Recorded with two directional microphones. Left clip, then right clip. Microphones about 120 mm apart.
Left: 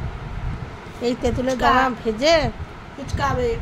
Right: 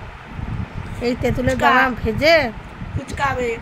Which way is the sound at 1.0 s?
10° right (ahead or behind).